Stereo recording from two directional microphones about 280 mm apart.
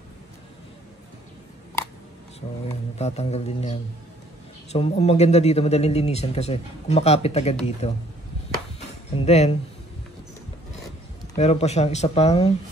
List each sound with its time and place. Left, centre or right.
3.0 s speech: left
9.1 s speech: left
11.3 s speech: left